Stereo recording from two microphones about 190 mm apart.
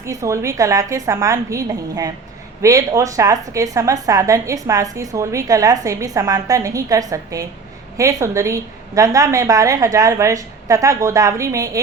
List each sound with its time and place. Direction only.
0.0 s a woman's voice: 15° right (ahead or behind)